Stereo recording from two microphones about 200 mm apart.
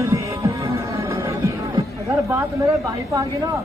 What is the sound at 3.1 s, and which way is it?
Speech, 15° right (ahead or behind).